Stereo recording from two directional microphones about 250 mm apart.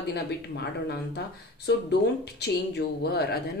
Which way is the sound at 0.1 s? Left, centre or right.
Left.